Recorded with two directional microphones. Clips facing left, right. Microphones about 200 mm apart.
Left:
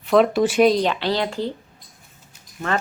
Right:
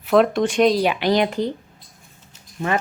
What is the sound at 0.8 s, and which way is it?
Speech, 15° right (ahead or behind).